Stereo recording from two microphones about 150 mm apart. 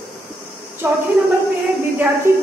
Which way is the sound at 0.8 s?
10° right (ahead or behind).